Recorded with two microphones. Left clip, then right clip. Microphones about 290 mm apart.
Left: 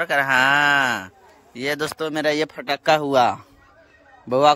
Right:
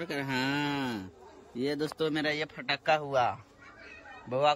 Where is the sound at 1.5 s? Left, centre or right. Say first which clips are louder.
Left 8 dB; left.